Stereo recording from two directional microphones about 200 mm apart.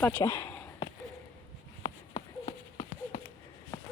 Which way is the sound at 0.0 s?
10° left (ahead or behind).